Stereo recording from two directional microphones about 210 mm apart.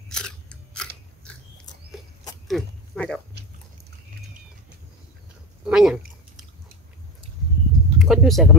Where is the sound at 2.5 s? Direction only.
5° left (ahead or behind).